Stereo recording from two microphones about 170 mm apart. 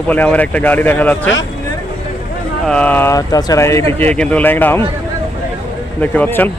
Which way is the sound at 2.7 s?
10° left (ahead or behind).